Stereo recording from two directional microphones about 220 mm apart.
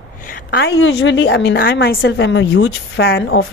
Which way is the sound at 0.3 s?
45° left (ahead or behind).